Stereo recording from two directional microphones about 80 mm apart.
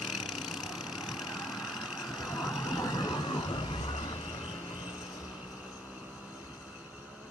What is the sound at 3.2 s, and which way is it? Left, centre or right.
Vehicle, left.